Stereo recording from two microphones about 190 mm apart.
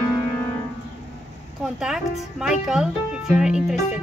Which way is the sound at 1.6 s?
Centre (ahead or behind).